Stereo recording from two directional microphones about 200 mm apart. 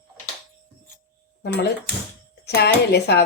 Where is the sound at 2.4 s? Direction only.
55° left (ahead or behind).